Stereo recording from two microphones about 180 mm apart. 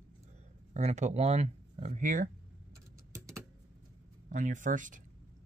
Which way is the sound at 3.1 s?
15° right (ahead or behind).